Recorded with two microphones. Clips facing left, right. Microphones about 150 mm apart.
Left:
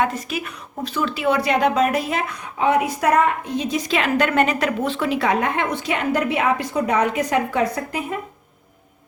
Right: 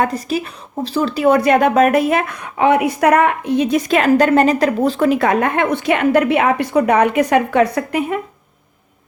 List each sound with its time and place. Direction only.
0.0 s speech: 35° right (ahead or behind); by 8.2 s 70° right (ahead or behind)